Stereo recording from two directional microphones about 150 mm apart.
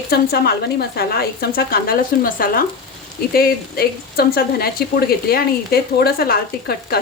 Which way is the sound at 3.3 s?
90° left.